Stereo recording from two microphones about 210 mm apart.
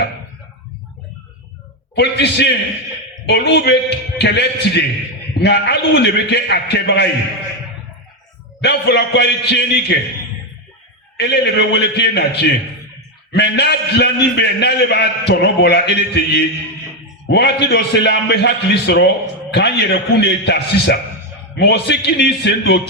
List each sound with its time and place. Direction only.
2.0 s a man's voice: 55° left (ahead or behind)
8.6 s a man's voice: 55° left (ahead or behind)
11.2 s a man's voice: 55° left (ahead or behind)
13.3 s a man's voice: 55° left (ahead or behind)